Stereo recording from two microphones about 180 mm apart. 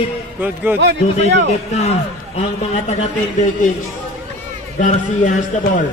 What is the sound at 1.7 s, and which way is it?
A man's voice, 35° left (ahead or behind).